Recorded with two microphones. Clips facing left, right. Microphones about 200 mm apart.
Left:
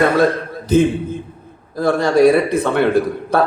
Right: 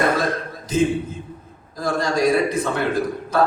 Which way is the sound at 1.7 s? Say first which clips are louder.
Left 7 dB; 60° left (ahead or behind).